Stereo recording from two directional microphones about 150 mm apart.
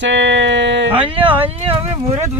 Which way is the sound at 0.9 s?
35° right (ahead or behind).